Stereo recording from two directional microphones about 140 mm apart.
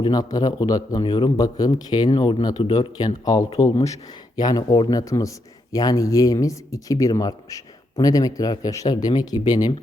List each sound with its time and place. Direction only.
0.0 s speech: 30° left (ahead or behind)